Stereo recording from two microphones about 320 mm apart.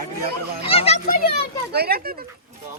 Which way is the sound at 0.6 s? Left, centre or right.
Centre.